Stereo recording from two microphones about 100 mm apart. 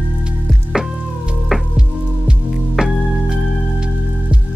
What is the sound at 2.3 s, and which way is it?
Music, 5° right (ahead or behind).